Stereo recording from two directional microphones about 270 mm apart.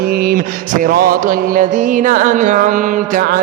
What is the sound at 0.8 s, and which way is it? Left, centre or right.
Music, right.